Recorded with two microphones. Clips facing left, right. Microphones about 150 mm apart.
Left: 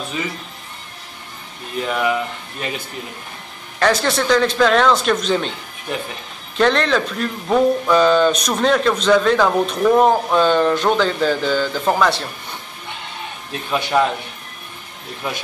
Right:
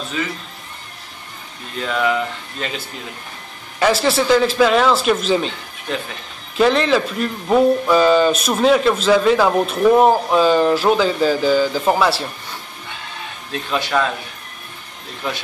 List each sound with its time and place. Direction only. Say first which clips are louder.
1.8 s speech: even; 15° left (ahead or behind)
3.8 s speech: right 1 dB; 5° right (ahead or behind)
6.5 s speech: right 1 dB; 5° right (ahead or behind)
13.7 s speech: left 2 dB; 15° left (ahead or behind)